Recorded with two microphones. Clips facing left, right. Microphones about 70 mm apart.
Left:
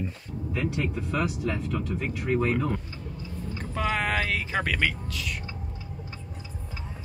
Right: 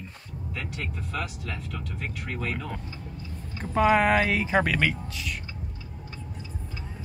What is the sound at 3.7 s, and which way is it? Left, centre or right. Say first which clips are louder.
Speech: right 7 dB; centre.